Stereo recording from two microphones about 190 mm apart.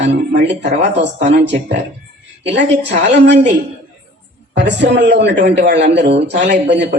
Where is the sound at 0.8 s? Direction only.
70° right (ahead or behind).